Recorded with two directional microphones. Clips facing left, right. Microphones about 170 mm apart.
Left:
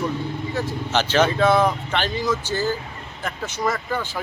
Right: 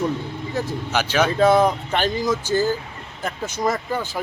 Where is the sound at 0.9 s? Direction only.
10° right (ahead or behind).